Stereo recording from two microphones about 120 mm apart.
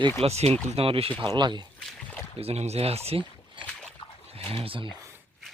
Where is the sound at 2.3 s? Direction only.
60° right (ahead or behind).